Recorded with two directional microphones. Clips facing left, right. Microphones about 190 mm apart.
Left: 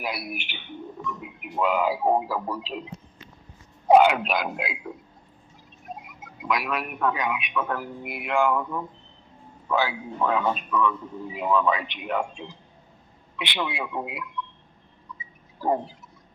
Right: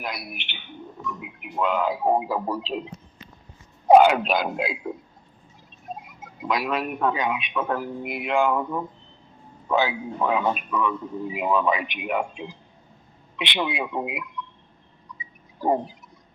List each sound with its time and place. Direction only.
0.0 s speech: 5° left (ahead or behind)
1.5 s speech: 5° left (ahead or behind)
2.1 s a man's voice: 20° right (ahead or behind)
3.8 s speech: 40° right (ahead or behind)
6.5 s a man's voice: 25° right (ahead or behind); by 12.5 s 10° right (ahead or behind)
13.3 s a man's voice: 20° right (ahead or behind)
15.6 s a man's voice: 15° right (ahead or behind)